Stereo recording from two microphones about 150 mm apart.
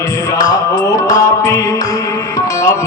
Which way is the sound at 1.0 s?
25° left (ahead or behind).